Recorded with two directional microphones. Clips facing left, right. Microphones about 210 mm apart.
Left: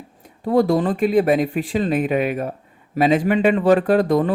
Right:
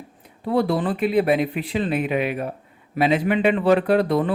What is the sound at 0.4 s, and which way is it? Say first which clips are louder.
Speech: left 4 dB; 45° left (ahead or behind).